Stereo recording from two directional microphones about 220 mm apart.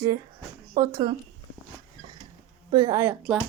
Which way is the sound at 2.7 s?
15° right (ahead or behind).